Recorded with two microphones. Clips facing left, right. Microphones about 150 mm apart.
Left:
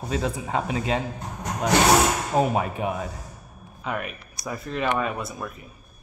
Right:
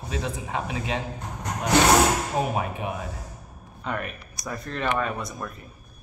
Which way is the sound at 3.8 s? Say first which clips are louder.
Left 1 dB; 5° left (ahead or behind).